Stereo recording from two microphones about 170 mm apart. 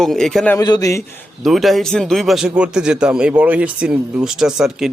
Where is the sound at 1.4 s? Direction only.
Centre (ahead or behind).